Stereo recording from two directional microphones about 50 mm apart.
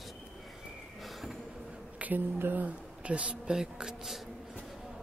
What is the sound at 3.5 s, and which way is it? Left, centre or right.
Speech, centre.